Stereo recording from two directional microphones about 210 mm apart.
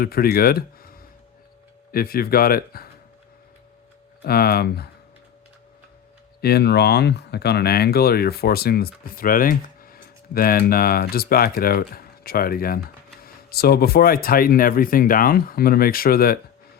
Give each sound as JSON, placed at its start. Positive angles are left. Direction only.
{"t": 0.0, "sound": "speech", "side_deg": 45}
{"t": 4.2, "sound": "speech", "side_deg": 45}
{"t": 6.4, "sound": "speech", "side_deg": 50}